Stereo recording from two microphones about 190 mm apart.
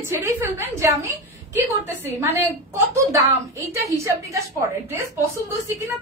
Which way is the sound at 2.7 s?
15° right (ahead or behind).